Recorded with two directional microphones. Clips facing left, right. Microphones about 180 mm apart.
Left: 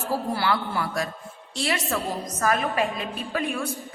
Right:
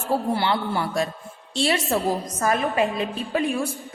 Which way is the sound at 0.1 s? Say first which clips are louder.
Right 3 dB; 25° right (ahead or behind).